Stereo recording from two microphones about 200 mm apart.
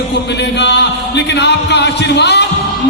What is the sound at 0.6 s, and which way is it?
Speech, 60° left (ahead or behind).